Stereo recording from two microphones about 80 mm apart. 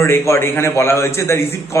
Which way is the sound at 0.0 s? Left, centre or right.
Left.